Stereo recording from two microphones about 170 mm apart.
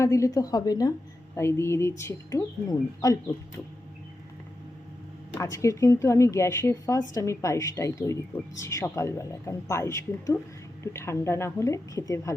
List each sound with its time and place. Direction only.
0.0 s a woman's voice: 20° left (ahead or behind)
5.3 s a woman's voice: 15° left (ahead or behind)